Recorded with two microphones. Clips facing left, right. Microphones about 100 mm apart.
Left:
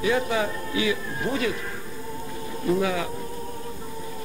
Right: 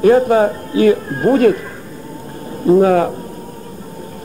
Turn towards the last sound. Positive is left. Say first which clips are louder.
# right 13 dB
turn(degrees=-50)  # may be behind; listen again after turning